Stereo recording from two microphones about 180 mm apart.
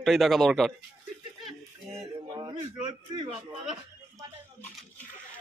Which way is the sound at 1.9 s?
25° right (ahead or behind).